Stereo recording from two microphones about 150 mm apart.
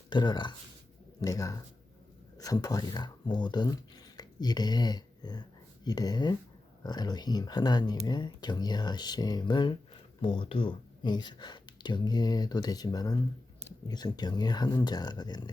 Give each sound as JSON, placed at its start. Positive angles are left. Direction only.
{"t": 0.1, "sound": "speech", "side_deg": 30}